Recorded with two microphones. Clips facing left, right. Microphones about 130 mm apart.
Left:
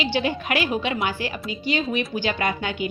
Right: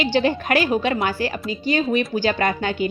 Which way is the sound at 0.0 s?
45° right (ahead or behind).